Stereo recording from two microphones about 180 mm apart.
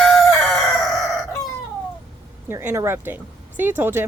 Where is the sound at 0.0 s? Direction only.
Centre (ahead or behind).